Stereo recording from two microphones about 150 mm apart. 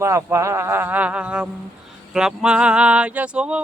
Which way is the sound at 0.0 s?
20° right (ahead or behind).